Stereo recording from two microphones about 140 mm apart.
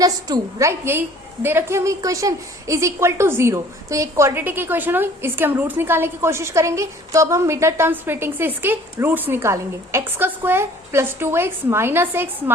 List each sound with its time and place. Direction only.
0.0 s a woman's voice: 25° right (ahead or behind)